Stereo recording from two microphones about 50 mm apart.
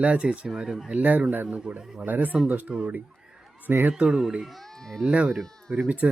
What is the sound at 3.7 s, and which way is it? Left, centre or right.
Speech, right.